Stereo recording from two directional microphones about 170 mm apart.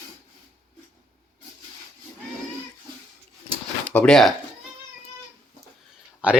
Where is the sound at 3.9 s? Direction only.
5° left (ahead or behind).